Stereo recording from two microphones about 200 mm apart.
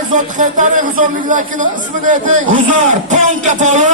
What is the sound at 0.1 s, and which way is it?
A man's voice, 40° right (ahead or behind).